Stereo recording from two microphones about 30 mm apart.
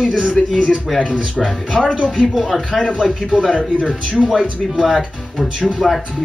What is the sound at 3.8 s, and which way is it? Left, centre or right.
Speech, right.